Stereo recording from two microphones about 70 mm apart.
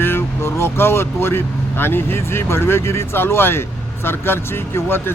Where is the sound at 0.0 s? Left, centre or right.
Left.